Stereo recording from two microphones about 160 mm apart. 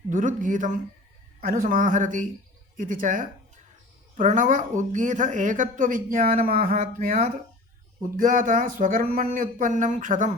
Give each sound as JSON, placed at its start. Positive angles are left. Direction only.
{"t": 0.1, "sound": "speech", "side_deg": -55}